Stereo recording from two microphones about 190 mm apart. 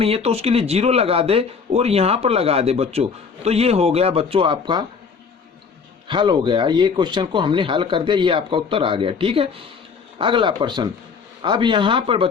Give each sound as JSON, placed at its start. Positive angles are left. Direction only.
{"t": 0.0, "sound": "speech", "side_deg": -30}
{"t": 6.1, "sound": "speech", "side_deg": -25}